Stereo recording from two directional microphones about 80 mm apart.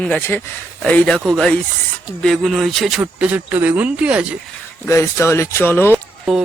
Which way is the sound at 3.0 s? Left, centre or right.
Centre.